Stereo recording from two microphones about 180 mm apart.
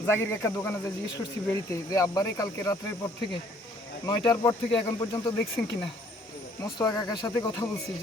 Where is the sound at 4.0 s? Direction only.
25° left (ahead or behind).